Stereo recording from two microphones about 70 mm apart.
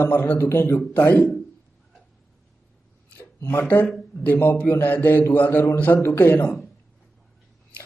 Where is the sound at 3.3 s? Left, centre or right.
Left.